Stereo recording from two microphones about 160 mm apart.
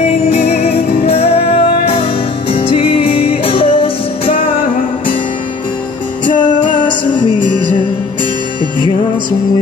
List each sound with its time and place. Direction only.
0.3 s music: 45° left (ahead or behind)
6.8 s music: 30° left (ahead or behind)